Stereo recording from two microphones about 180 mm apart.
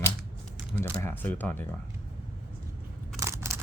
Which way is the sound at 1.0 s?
10° left (ahead or behind).